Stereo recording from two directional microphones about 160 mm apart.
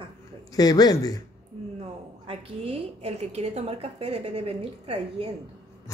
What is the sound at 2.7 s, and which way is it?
A woman's voice, 40° right (ahead or behind).